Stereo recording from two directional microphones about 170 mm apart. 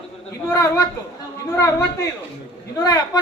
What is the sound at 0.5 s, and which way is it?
Speech, 20° left (ahead or behind).